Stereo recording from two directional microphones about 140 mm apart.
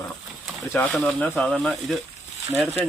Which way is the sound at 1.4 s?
5° left (ahead or behind).